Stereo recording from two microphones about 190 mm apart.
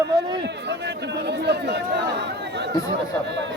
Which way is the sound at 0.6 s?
65° right (ahead or behind).